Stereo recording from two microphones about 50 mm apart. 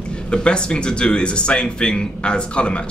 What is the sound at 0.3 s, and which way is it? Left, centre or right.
A man's voice, centre.